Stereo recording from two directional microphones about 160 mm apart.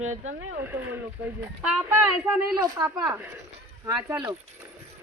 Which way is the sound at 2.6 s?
25° right (ahead or behind).